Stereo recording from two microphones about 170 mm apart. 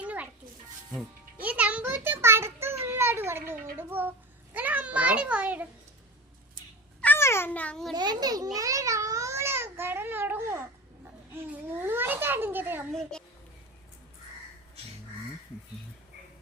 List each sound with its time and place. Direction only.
0.0 s music: 10° right (ahead or behind)
4.5 s a sound: 10° right (ahead or behind)
7.0 s babbling: 15° left (ahead or behind)
7.9 s a child's voice: 25° right (ahead or behind)
8.5 s babbling: 20° right (ahead or behind)
11.5 s a child's voice: 10° right (ahead or behind)
12.9 s a child's voice: 5° left (ahead or behind)